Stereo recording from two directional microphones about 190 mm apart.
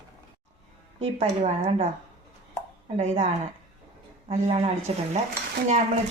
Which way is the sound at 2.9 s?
35° right (ahead or behind).